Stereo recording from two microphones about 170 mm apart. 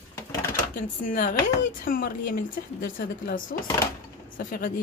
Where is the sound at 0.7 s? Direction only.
55° left (ahead or behind).